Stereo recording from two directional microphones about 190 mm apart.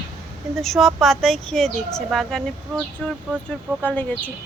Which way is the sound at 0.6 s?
Centre (ahead or behind).